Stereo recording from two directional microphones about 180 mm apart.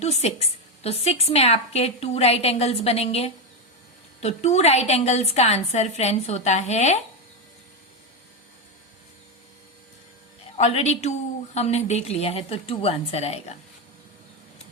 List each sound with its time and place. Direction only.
0.0 s a woman's voice: 35° left (ahead or behind)
10.6 s a woman's voice: 35° left (ahead or behind)